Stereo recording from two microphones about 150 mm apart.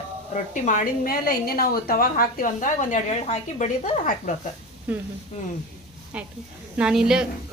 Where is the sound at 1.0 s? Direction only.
90° left; by 4.3 s 55° left (ahead or behind).